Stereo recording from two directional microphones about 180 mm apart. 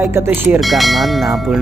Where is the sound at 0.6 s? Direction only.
Centre (ahead or behind).